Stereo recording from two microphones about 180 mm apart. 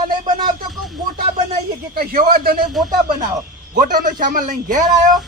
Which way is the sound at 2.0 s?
50° right (ahead or behind).